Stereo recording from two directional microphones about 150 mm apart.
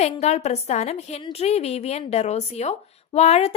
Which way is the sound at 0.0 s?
45° left (ahead or behind).